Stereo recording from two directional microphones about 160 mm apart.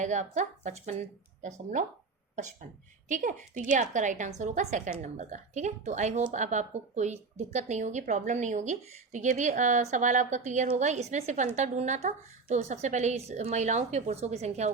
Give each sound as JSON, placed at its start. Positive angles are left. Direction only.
{"t": 0.0, "sound": "speech", "side_deg": -50}
{"t": 3.1, "sound": "speech", "side_deg": -50}